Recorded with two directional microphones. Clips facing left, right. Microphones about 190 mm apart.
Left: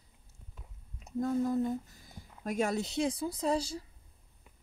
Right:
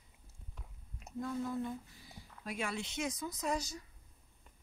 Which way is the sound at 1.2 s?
40° left (ahead or behind).